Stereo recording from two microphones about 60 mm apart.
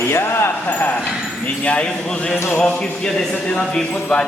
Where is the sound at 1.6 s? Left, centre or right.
Centre.